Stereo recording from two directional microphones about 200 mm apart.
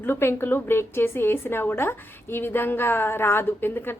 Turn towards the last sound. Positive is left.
turn(degrees=10)  # may be behind; listen again after turning